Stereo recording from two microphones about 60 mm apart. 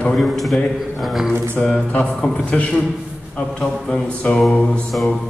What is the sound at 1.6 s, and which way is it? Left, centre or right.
A man's voice, centre.